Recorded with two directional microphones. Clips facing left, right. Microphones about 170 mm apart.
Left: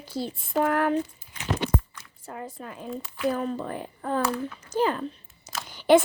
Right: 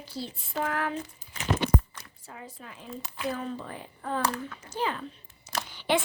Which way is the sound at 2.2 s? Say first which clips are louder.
Left 8 dB; 50° left (ahead or behind).